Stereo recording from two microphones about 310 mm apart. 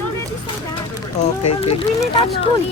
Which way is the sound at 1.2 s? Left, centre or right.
Left.